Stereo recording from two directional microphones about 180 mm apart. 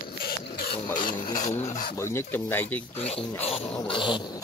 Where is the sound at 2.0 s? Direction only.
15° left (ahead or behind).